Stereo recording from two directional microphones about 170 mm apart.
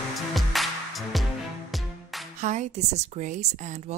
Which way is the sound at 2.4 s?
45° right (ahead or behind).